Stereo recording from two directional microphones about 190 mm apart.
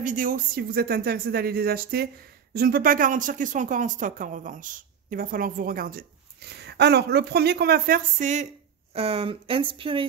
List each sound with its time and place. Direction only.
0.0 s speech: 45° right (ahead or behind)
6.6 s speech: 60° right (ahead or behind); by 10.0 s 25° right (ahead or behind)